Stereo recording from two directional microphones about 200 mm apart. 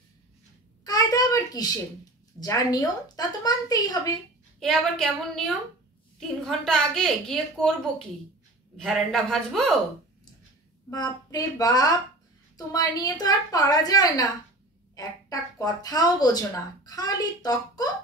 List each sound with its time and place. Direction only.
0.8 s a sound: 20° left (ahead or behind)
2.4 s a woman's voice: 20° left (ahead or behind)
4.6 s a woman's voice: 5° left (ahead or behind)
8.7 s a woman's voice: centre (ahead or behind)
10.9 s a woman's voice: 20° left (ahead or behind)